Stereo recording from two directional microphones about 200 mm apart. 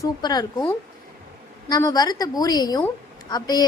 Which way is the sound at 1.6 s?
20° left (ahead or behind).